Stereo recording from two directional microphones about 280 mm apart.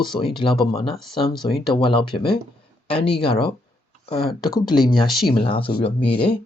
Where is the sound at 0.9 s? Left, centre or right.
Centre.